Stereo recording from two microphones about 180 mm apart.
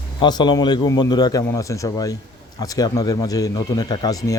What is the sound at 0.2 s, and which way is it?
Speech, 25° left (ahead or behind).